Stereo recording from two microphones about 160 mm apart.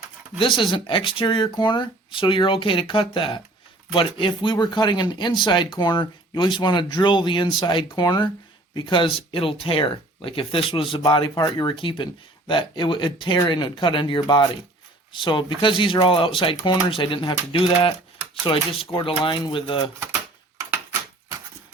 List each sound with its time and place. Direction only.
0.3 s speech: 30° left (ahead or behind)